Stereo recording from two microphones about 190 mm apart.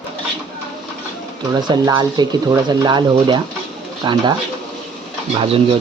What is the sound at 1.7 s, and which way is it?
Speech, 20° right (ahead or behind).